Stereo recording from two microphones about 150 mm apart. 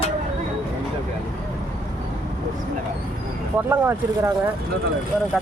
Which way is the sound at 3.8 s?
15° right (ahead or behind).